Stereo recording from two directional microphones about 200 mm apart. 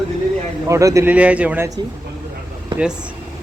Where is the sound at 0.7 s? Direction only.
15° right (ahead or behind).